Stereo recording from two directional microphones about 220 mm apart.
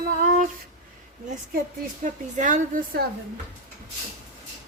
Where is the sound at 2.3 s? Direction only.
35° right (ahead or behind).